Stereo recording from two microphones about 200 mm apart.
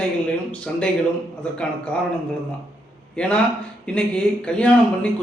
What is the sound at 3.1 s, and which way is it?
A man's voice, 5° left (ahead or behind).